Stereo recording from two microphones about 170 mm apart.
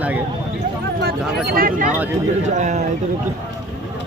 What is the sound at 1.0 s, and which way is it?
Speech, 65° right (ahead or behind).